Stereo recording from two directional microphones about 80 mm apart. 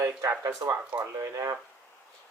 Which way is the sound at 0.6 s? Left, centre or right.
Right.